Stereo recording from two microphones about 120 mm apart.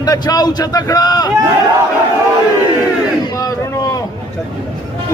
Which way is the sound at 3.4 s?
30° left (ahead or behind).